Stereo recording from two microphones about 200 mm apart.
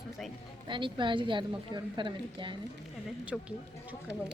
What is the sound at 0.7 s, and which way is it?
A woman's voice, 25° right (ahead or behind).